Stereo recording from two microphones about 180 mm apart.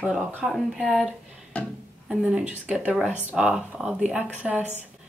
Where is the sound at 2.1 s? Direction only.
5° right (ahead or behind).